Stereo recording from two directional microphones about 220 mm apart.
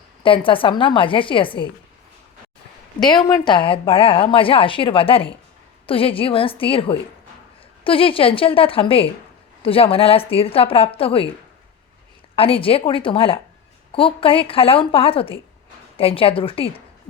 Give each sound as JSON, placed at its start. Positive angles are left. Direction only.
{"t": 0.2, "sound": "a woman's voice", "side_deg": 25}
{"t": 3.0, "sound": "a woman's voice", "side_deg": 20}
{"t": 12.4, "sound": "a woman's voice", "side_deg": 25}